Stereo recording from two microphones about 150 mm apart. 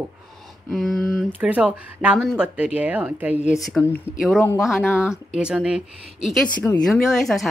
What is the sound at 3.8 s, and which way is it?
Speech, 5° left (ahead or behind).